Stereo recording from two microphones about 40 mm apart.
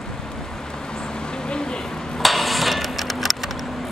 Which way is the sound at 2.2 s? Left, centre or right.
Centre.